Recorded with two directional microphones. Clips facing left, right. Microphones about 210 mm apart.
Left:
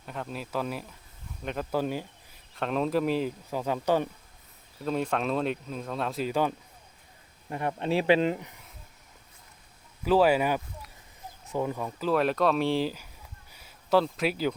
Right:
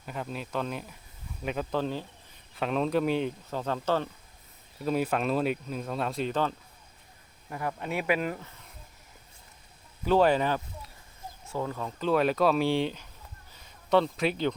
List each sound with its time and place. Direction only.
0.0 s speech: centre (ahead or behind)
2.6 s speech: centre (ahead or behind)
4.9 s speech: 5° right (ahead or behind)
7.5 s speech: 25° left (ahead or behind)
10.0 s speech: 5° left (ahead or behind)
13.5 s a sound: 5° left (ahead or behind)